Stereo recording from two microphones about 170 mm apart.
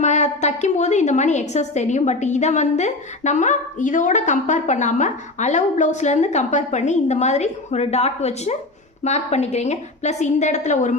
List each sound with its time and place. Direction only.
0.0 s a woman's voice: 45° left (ahead or behind)